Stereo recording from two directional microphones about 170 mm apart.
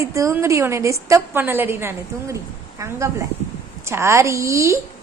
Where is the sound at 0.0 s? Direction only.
20° right (ahead or behind).